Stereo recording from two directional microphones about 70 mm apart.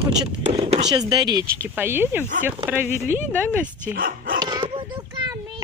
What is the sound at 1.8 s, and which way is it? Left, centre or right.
Speech, right.